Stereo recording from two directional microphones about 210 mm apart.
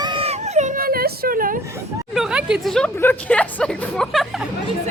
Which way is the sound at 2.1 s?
5° right (ahead or behind).